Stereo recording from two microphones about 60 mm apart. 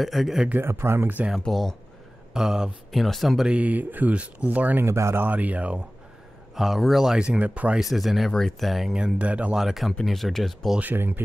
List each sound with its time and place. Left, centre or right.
0.0 s speech: centre
0.7 s speech: right
1.4 s speech: centre
2.3 s speech: centre
2.9 s speech: centre
3.4 s speech: right
4.8 s speech: right
5.2 s speech: right
6.5 s speech: centre; by 7.8 s right
7.9 s speech: centre
8.9 s speech: centre
9.6 s speech: centre
10.8 s speech: right